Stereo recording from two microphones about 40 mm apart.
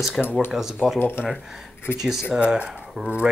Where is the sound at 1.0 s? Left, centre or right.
Left.